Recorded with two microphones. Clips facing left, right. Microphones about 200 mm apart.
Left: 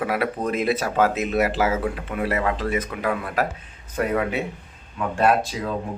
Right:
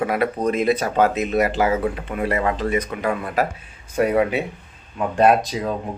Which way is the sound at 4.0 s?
15° right (ahead or behind).